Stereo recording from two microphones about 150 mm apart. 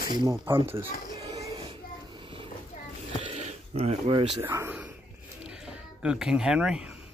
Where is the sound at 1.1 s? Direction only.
25° right (ahead or behind).